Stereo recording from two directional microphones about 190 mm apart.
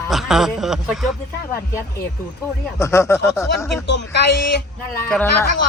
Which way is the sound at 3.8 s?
65° left (ahead or behind).